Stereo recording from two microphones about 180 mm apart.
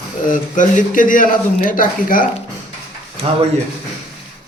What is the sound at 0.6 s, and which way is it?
Speech, 45° left (ahead or behind).